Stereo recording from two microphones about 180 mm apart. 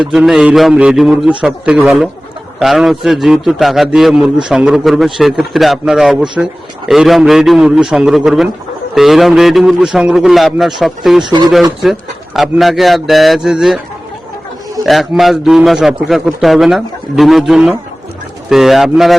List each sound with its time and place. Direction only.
0.0 s a man's voice: 5° right (ahead or behind)
11.2 s speech: 25° right (ahead or behind)
11.8 s a man's voice: centre (ahead or behind)
14.8 s a man's voice: centre (ahead or behind)